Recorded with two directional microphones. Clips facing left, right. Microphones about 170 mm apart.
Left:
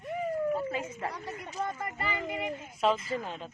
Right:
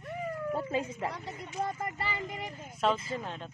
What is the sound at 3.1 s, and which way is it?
Speech, centre (ahead or behind).